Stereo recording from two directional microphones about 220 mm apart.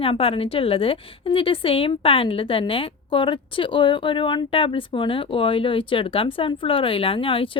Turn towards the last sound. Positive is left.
turn(degrees=25)  # may be behind; listen again after turning